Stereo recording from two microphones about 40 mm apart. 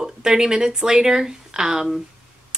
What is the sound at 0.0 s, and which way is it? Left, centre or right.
Speech, centre.